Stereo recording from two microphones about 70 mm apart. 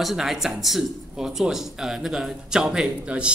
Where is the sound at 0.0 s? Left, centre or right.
Centre.